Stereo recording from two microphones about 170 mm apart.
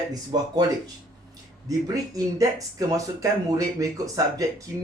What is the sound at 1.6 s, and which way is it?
Speech, 20° right (ahead or behind).